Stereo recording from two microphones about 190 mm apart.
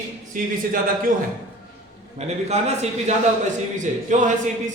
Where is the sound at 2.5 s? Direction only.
35° right (ahead or behind).